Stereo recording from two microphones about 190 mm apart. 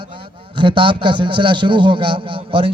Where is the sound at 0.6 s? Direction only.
25° right (ahead or behind).